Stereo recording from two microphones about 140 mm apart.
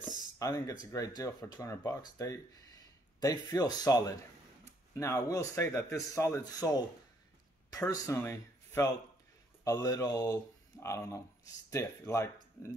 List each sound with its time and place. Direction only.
0.4 s speech: 25° left (ahead or behind)